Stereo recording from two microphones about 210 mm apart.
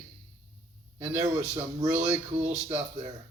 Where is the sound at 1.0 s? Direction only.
10° right (ahead or behind).